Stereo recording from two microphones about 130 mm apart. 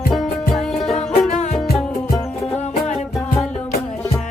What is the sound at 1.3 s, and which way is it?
Music, 60° left (ahead or behind).